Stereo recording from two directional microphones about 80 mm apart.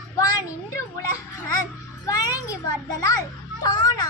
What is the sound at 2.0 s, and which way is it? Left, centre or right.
Music, left.